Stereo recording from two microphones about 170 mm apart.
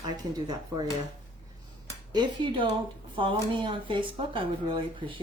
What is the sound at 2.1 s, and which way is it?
Speech, 25° right (ahead or behind).